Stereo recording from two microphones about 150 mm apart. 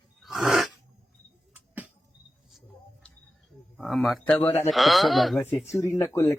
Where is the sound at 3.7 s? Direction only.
Centre (ahead or behind).